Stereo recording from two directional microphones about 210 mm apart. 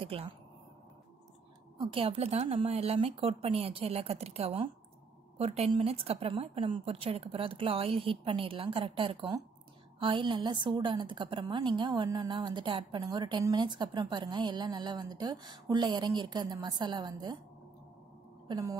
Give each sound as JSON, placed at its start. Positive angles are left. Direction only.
{"t": 0.0, "sound": "speech", "side_deg": -25}
{"t": 1.8, "sound": "a woman's voice", "side_deg": -25}
{"t": 18.5, "sound": "a woman's voice", "side_deg": -15}